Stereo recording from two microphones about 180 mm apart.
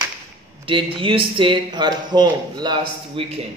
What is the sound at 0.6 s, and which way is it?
Speech, 30° right (ahead or behind).